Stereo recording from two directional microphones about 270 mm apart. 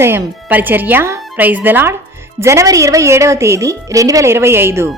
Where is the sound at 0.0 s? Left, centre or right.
Centre.